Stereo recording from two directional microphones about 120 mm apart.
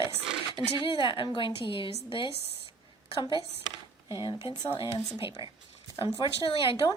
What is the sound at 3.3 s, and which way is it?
Speech, 25° right (ahead or behind).